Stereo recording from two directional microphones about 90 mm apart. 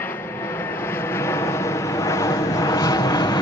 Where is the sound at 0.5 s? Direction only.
25° left (ahead or behind).